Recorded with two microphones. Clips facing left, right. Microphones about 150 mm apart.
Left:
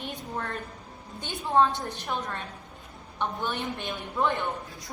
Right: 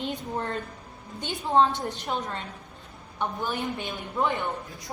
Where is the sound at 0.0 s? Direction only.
25° right (ahead or behind).